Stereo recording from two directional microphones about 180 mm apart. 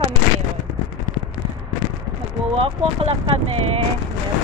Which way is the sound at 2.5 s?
30° right (ahead or behind).